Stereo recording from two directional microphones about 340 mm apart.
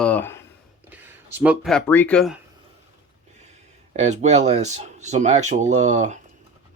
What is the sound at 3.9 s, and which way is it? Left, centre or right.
Speech, centre.